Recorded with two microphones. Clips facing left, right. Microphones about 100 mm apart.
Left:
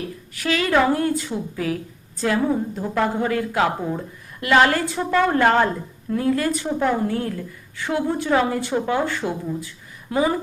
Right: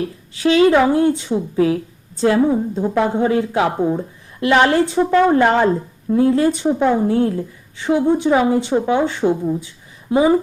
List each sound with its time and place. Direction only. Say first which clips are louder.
0.3 s a woman's voice: right 7 dB; 25° right (ahead or behind)